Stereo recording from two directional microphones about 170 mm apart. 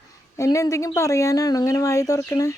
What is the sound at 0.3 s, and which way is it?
Speech, 20° left (ahead or behind).